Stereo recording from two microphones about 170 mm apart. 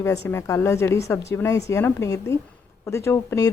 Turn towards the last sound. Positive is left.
turn(degrees=15)  # may be behind; listen again after turning